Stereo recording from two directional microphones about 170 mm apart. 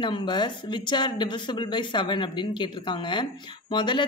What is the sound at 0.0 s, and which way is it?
A woman's voice, 30° left (ahead or behind).